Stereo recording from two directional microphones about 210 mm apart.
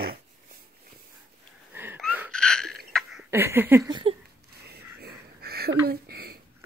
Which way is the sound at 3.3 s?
10° right (ahead or behind).